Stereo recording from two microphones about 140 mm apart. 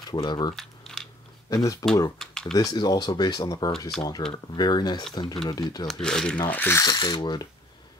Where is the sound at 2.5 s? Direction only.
30° left (ahead or behind).